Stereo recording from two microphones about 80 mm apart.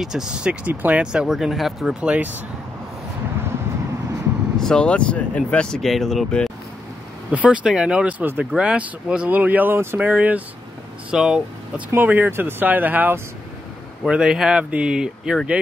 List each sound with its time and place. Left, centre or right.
0.0 s speech: centre
1.2 s speech: centre
4.6 s speech: centre
7.2 s speech: centre
9.9 s speech: centre
11.9 s speech: right
14.0 s speech: centre